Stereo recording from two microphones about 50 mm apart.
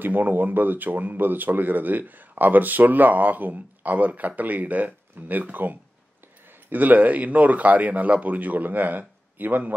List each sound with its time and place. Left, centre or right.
0.0 s speech: right